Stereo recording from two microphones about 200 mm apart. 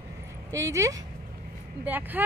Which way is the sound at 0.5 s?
15° right (ahead or behind).